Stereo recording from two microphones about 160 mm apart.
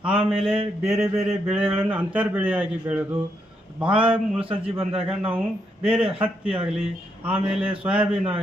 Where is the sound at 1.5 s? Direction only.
10° right (ahead or behind).